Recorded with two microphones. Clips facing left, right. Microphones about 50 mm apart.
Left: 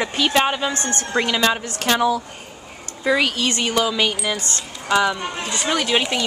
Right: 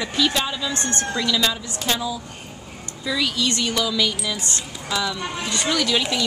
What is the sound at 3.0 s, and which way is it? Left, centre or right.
Speech, left.